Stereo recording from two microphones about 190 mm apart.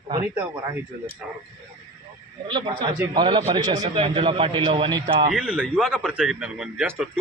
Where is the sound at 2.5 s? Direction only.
25° right (ahead or behind).